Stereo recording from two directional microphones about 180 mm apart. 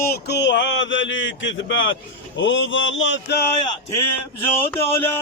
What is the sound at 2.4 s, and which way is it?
Mantra, 90° left.